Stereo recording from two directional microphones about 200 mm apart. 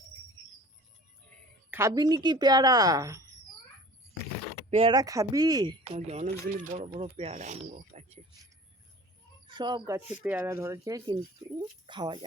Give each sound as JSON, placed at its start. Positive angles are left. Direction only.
{"t": 1.7, "sound": "speech", "side_deg": -15}
{"t": 4.7, "sound": "speech", "side_deg": -25}
{"t": 5.8, "sound": "speech", "side_deg": -30}
{"t": 9.5, "sound": "speech", "side_deg": -20}